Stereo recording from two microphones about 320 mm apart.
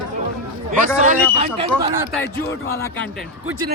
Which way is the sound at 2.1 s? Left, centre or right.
Centre.